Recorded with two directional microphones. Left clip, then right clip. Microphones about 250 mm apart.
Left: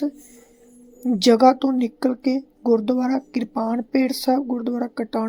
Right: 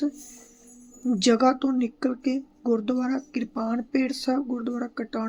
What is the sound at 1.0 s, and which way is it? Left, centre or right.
A woman's voice, centre.